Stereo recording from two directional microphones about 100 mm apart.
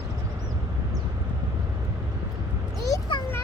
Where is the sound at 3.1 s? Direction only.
55° left (ahead or behind).